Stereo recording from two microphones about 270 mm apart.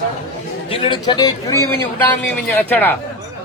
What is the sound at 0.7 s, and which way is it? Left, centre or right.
A man's voice, centre.